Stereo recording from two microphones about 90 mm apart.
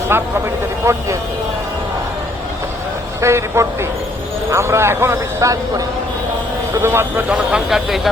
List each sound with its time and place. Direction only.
0.1 s a man's voice: 25° right (ahead or behind)
3.2 s a man's voice: 30° right (ahead or behind)
6.8 s a man's voice: 25° right (ahead or behind)
7.3 s a man's voice: centre (ahead or behind)